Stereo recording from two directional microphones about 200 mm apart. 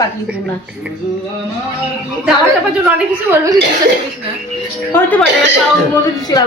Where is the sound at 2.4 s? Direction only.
10° right (ahead or behind).